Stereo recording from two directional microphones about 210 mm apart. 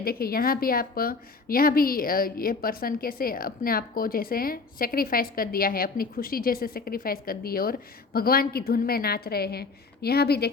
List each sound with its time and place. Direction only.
0.0 s a woman's voice: 45° left (ahead or behind)